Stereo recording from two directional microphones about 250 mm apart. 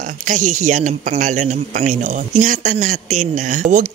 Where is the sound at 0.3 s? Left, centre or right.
Right.